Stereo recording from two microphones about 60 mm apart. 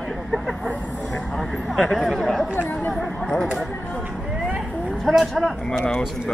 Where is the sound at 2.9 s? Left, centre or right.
Centre.